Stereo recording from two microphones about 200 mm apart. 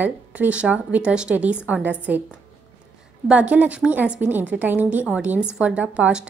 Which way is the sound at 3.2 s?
5° right (ahead or behind).